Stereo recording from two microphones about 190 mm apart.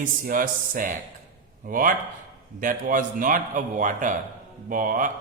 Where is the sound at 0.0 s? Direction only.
45° right (ahead or behind).